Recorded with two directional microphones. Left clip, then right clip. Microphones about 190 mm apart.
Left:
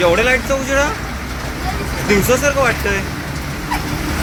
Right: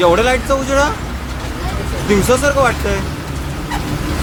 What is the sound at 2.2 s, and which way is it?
Speech, 15° right (ahead or behind).